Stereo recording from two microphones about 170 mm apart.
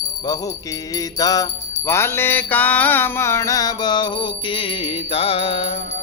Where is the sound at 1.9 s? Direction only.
15° left (ahead or behind).